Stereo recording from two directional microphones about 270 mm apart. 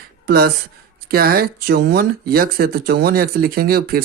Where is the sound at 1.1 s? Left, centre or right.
Right.